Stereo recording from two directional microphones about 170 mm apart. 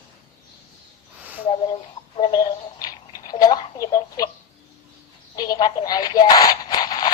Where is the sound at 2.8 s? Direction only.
20° left (ahead or behind).